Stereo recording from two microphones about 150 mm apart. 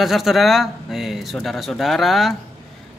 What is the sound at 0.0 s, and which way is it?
Speech, centre (ahead or behind).